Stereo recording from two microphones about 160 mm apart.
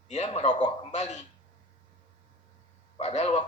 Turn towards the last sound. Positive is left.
turn(degrees=45)  # may be behind; listen again after turning